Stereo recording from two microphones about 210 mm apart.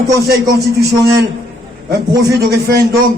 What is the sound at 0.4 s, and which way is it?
Speech, 15° right (ahead or behind).